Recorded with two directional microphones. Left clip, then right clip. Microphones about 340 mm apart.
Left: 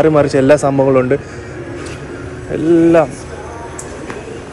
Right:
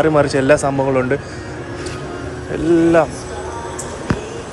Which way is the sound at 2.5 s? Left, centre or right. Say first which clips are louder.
Left 3 dB; centre.